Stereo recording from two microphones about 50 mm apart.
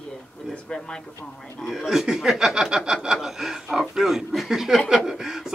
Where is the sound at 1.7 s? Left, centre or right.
Centre.